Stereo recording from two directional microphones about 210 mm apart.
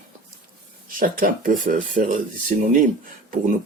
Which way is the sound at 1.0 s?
40° right (ahead or behind).